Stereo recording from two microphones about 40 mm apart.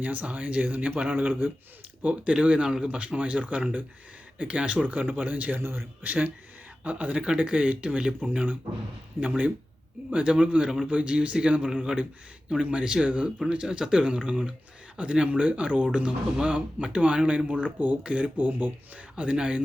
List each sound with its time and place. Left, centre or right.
0.0 s a man's voice: right
2.0 s speech: right
5.5 s speech: right
6.0 s a man's voice: right
9.2 s speech: right
10.1 s speech: right
19.1 s speech: right